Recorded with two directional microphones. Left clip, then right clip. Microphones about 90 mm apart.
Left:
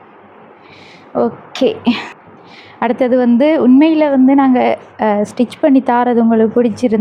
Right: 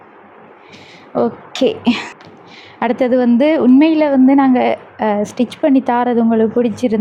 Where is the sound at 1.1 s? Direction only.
20° right (ahead or behind).